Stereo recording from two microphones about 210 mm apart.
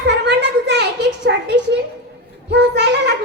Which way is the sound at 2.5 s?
55° right (ahead or behind).